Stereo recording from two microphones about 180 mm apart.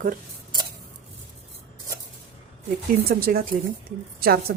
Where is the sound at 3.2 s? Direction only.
55° right (ahead or behind).